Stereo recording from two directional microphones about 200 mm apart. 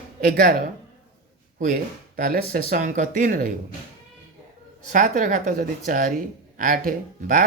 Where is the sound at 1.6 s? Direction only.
45° right (ahead or behind).